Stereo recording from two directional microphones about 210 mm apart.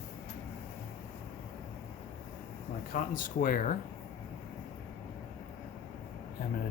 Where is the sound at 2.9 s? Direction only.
40° left (ahead or behind).